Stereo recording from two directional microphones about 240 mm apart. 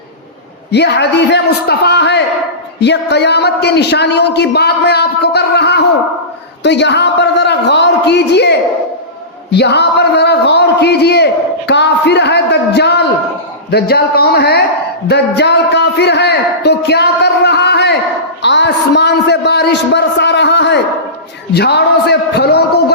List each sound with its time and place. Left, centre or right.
0.7 s a man's voice: left
11.7 s a sound: left
13.7 s a man's voice: left